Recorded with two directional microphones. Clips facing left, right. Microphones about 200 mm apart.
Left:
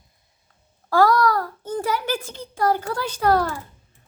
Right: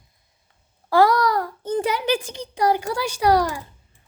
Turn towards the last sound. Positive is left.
turn(degrees=-15)  # may be behind; listen again after turning